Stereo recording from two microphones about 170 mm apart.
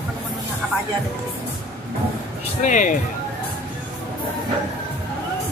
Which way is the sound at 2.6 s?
45° left (ahead or behind).